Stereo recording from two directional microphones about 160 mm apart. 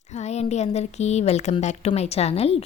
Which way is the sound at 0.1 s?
45° left (ahead or behind).